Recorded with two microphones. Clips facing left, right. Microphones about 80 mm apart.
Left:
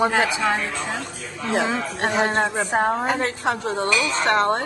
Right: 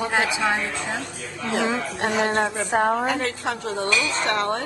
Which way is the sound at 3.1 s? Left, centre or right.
Left.